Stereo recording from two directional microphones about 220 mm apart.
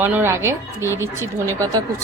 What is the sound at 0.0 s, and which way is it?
A woman's voice, 10° right (ahead or behind).